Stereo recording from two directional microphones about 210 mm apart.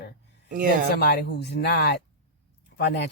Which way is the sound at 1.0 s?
50° left (ahead or behind).